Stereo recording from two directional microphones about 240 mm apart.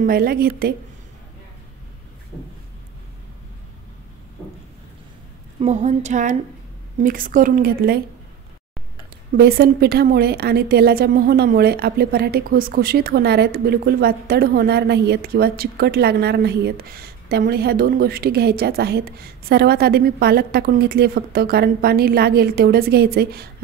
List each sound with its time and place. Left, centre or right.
0.0 s a woman's voice: right
5.6 s a woman's voice: right
9.3 s a woman's voice: right